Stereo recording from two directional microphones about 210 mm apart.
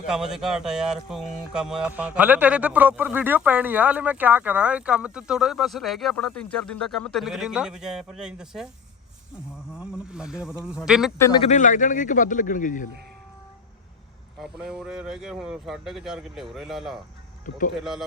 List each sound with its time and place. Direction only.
0.1 s speech: 5° right (ahead or behind)
9.7 s speech: 5° right (ahead or behind)
11.4 s speech: 35° left (ahead or behind)
14.4 s speech: centre (ahead or behind)